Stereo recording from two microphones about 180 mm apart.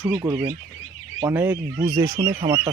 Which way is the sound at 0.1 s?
15° right (ahead or behind).